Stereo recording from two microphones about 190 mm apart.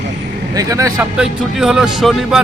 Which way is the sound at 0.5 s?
15° right (ahead or behind).